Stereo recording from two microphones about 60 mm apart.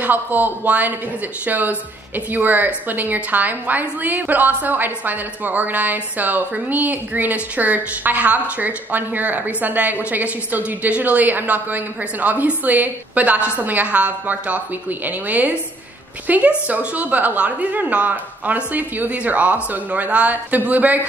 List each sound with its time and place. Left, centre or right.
0.0 s speech: right